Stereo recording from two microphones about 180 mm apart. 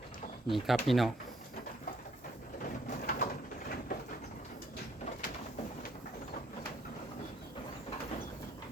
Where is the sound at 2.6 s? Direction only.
50° left (ahead or behind).